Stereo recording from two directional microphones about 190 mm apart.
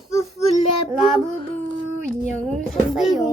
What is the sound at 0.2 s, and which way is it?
Child singing, 35° left (ahead or behind).